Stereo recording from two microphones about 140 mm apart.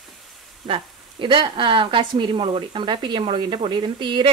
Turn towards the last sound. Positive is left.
turn(degrees=-35)  # may be behind; listen again after turning